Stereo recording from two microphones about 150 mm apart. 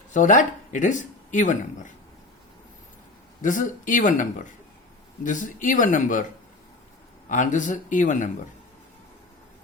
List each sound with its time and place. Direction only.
0.1 s speech: 55° left (ahead or behind)
3.4 s speech: 60° left (ahead or behind)
7.3 s speech: 55° left (ahead or behind)